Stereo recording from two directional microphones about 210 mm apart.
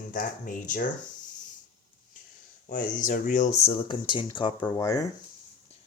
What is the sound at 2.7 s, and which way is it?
Speech, 40° left (ahead or behind).